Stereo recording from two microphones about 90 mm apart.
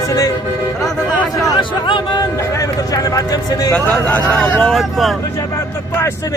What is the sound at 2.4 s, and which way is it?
Speech, 35° left (ahead or behind).